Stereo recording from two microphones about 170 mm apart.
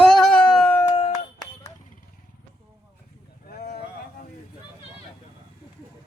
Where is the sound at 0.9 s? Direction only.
35° left (ahead or behind).